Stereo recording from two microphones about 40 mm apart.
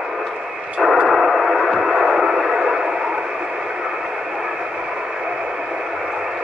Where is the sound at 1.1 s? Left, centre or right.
Centre.